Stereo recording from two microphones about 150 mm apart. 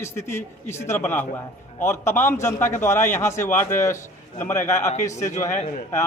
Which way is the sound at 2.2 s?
15° left (ahead or behind).